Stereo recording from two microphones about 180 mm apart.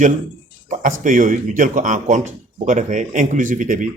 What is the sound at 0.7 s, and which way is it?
A man's voice, 45° right (ahead or behind).